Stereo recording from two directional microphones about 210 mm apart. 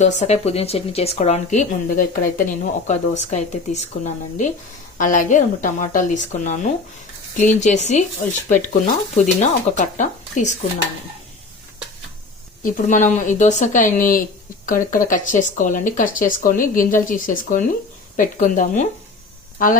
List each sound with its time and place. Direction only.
0.0 s speech: 35° left (ahead or behind)
9.1 s speech: 35° left (ahead or behind)
12.6 s speech: 40° left (ahead or behind)